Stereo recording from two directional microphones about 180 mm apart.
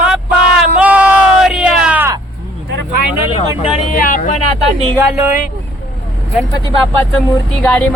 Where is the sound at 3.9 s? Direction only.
50° left (ahead or behind).